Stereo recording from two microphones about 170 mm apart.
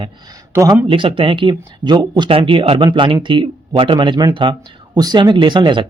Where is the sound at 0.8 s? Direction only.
30° right (ahead or behind).